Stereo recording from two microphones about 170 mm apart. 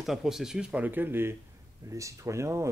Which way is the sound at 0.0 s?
Centre (ahead or behind).